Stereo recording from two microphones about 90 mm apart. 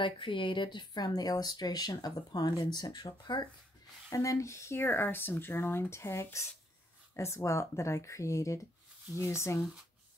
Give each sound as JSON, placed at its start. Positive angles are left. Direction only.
{"t": 0.0, "sound": "speech", "side_deg": 65}
{"t": 4.1, "sound": "speech", "side_deg": 35}